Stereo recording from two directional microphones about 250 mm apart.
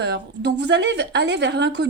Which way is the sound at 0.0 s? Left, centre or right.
Right.